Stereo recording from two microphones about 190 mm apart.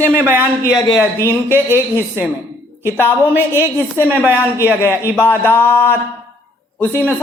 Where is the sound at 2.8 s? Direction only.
10° left (ahead or behind).